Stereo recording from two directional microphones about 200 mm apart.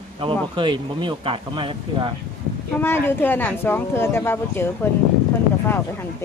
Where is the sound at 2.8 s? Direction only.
10° left (ahead or behind).